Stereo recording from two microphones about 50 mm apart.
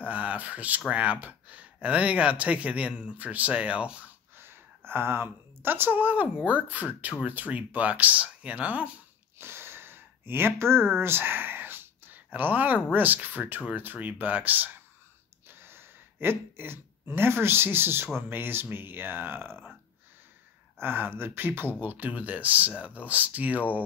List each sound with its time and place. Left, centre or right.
0.0 s speech: right
4.4 s a woman's voice: right
9.4 s a sound: right
12.9 s speech: right
15.6 s speech: right
20.8 s speech: right
21.7 s speech: right